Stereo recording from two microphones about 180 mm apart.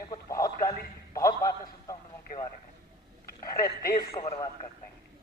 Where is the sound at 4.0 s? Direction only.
30° left (ahead or behind).